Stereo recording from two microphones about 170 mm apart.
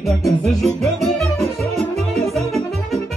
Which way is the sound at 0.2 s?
Centre (ahead or behind).